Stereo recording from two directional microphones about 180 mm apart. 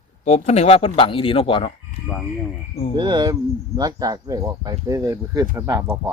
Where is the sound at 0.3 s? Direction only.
35° left (ahead or behind).